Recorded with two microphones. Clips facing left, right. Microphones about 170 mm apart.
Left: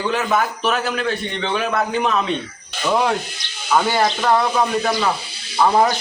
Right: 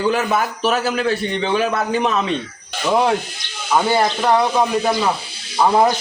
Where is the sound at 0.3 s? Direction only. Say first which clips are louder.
Right 1 dB; 5° right (ahead or behind).